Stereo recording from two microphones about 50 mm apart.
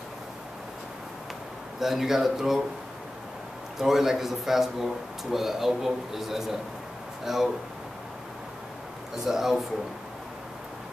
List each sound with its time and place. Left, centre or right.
1.8 s a man's voice: centre
3.7 s a man's voice: centre
9.1 s a man's voice: centre